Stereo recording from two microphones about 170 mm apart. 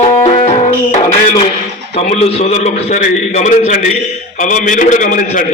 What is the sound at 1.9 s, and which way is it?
A man's voice, 40° left (ahead or behind).